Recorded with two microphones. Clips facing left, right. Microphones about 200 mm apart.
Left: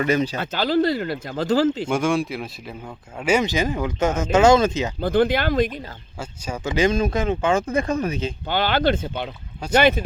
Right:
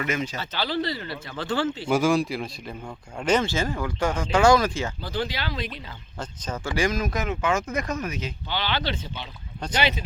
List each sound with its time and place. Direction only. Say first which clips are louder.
0.0 s speech: left 7 dB; 35° left (ahead or behind)
0.3 s speech: left 7 dB; 45° left (ahead or behind)
1.9 s speech: even; centre (ahead or behind); by 4.9 s 20° left (ahead or behind)
4.9 s speech: left 11 dB; 55° left (ahead or behind)
6.1 s speech: left 2 dB; 10° left (ahead or behind)
6.7 s speech: left 6 dB; 20° left (ahead or behind)
8.4 s speech: left 9 dB; 50° left (ahead or behind)